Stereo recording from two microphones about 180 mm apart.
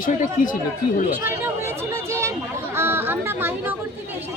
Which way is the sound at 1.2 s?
15° right (ahead or behind).